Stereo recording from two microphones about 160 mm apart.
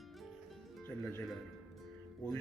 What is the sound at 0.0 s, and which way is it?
Music, centre (ahead or behind).